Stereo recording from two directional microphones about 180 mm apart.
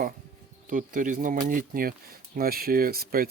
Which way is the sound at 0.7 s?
45° right (ahead or behind).